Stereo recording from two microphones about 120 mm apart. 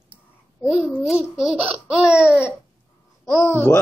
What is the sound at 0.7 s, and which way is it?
Speech, 5° right (ahead or behind).